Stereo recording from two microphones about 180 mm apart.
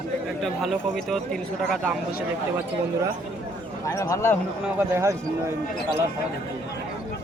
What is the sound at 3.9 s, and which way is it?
Speech, 15° left (ahead or behind).